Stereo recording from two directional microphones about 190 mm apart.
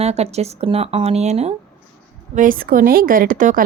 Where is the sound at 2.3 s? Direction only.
45° right (ahead or behind).